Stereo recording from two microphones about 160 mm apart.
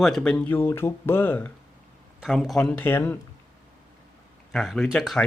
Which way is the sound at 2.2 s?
Centre (ahead or behind).